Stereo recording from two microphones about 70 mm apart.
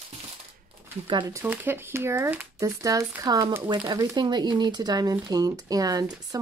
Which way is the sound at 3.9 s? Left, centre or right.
Right.